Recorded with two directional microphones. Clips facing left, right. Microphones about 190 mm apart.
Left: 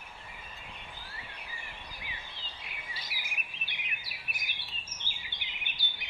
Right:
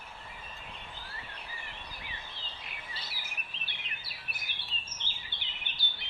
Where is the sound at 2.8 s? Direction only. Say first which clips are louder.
Even; 10° left (ahead or behind).